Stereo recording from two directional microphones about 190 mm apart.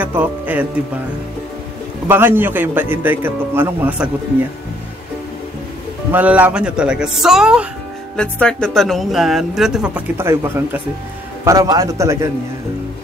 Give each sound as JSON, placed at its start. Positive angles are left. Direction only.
{"t": 0.0, "sound": "speech", "side_deg": -10}
{"t": 2.0, "sound": "a man's voice", "side_deg": -10}
{"t": 6.1, "sound": "a woman's voice", "side_deg": -10}